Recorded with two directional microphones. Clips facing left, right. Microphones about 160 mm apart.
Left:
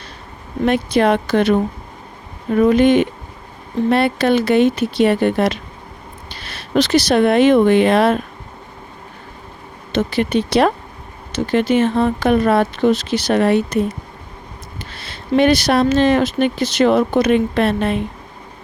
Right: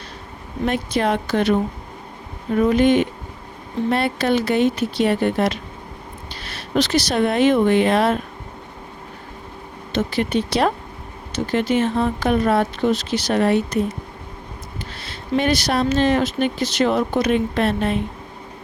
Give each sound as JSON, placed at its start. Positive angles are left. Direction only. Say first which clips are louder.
{"t": 0.6, "sound": "speech", "louder": "left 5 dB", "side_deg": 75}
{"t": 2.6, "sound": "speech", "louder": "left 3 dB", "side_deg": 75}
{"t": 9.9, "sound": "speech", "louder": "left 3 dB", "side_deg": 75}
{"t": 15.0, "sound": "speech", "louder": "left 6 dB", "side_deg": 70}